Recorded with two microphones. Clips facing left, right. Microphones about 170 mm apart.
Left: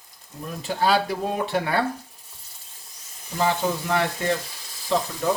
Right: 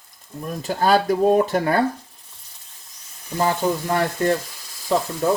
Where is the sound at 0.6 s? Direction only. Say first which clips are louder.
Right 3 dB; 45° right (ahead or behind).